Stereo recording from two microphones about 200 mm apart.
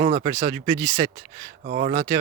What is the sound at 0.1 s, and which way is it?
Speech, 35° right (ahead or behind).